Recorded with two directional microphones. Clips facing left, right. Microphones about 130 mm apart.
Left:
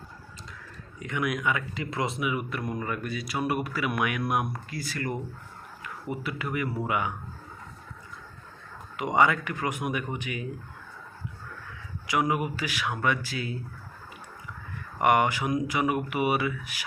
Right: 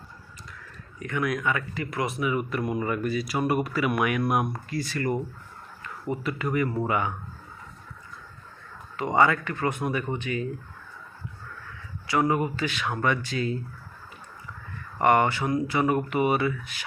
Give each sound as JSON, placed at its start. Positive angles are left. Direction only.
{"t": 0.9, "sound": "speech", "side_deg": 20}
{"t": 2.2, "sound": "speech", "side_deg": 5}
{"t": 6.2, "sound": "speech", "side_deg": 5}
{"t": 9.0, "sound": "speech", "side_deg": 15}
{"t": 12.0, "sound": "speech", "side_deg": 15}
{"t": 14.9, "sound": "speech", "side_deg": 15}